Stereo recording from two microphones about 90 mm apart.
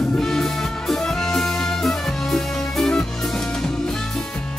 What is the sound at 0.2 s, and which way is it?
Music, 5° left (ahead or behind).